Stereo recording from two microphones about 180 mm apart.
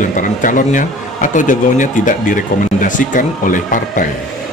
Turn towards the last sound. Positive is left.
turn(degrees=45)  # may be behind; listen again after turning